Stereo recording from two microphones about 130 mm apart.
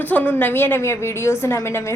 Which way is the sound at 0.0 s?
15° left (ahead or behind).